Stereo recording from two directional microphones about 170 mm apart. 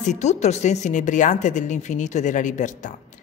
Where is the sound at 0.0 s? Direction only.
45° left (ahead or behind).